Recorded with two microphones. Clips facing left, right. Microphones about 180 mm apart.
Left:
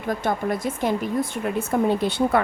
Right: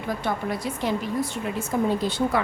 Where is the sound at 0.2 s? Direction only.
50° left (ahead or behind).